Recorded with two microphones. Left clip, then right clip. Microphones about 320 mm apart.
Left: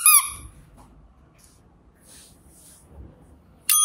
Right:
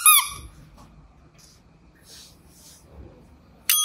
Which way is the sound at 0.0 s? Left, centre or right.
Centre.